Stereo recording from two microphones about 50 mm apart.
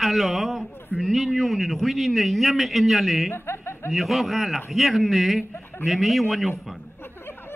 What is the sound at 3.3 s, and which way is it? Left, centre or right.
Chuckle, left.